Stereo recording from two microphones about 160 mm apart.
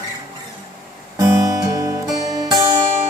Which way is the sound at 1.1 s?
20° right (ahead or behind).